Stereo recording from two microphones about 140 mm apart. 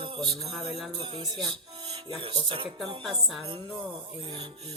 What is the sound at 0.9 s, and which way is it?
Speech, 35° right (ahead or behind).